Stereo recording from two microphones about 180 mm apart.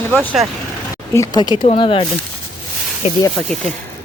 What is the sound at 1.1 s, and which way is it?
Speech, 20° left (ahead or behind).